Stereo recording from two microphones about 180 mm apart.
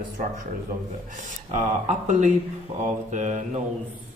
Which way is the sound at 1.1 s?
40° right (ahead or behind).